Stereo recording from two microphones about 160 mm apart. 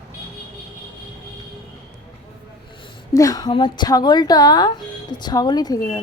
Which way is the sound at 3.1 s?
20° left (ahead or behind).